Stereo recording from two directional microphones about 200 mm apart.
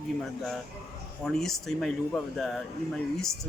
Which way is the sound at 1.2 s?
Centre (ahead or behind).